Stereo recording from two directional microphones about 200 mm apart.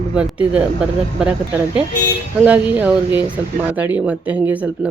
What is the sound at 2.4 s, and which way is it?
Speech, 5° right (ahead or behind).